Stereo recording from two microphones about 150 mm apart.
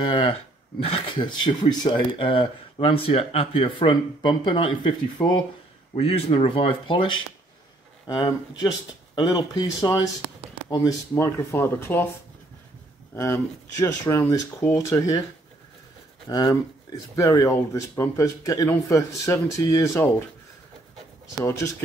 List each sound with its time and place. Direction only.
0.0 s speech: 30° left (ahead or behind)
5.9 s speech: 40° left (ahead or behind); by 12.1 s 15° left (ahead or behind)
13.1 s speech: 20° left (ahead or behind)
16.3 s speech: 25° left (ahead or behind)